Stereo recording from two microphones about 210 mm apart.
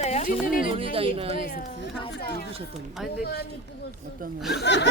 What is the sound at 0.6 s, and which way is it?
Speech, 25° right (ahead or behind).